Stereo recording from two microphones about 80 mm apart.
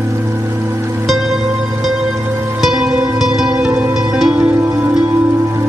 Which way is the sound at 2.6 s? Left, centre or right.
Centre.